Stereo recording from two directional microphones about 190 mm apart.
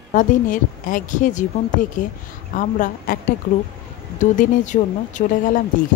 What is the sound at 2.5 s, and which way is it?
Speech, 45° left (ahead or behind).